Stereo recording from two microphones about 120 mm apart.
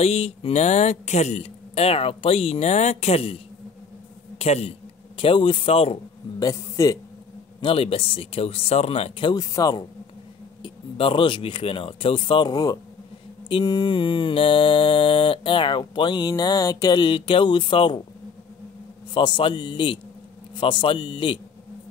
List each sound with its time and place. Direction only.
0.0 s speech: 60° left (ahead or behind)
4.4 s speech: 60° left (ahead or behind)
6.4 s a man's voice: 25° left (ahead or behind)
7.6 s mantra: 50° left (ahead or behind)
9.3 s speech: 30° left (ahead or behind)
10.6 s mantra: 45° left (ahead or behind)
19.1 s mantra: 40° left (ahead or behind)